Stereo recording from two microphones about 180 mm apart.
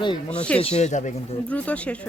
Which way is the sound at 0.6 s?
35° left (ahead or behind).